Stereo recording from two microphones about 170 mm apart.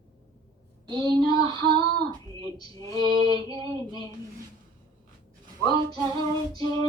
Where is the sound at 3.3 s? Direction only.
25° right (ahead or behind).